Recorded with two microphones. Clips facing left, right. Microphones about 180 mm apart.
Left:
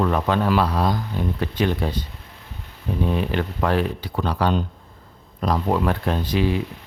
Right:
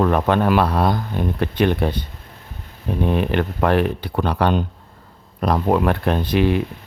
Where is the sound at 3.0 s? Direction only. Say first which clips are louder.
Right 4 dB; 60° right (ahead or behind).